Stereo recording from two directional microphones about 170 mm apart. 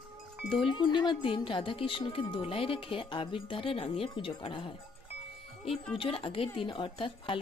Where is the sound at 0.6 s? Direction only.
30° left (ahead or behind).